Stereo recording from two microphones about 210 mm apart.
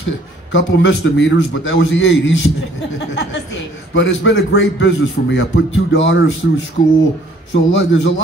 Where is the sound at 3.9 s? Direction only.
60° left (ahead or behind).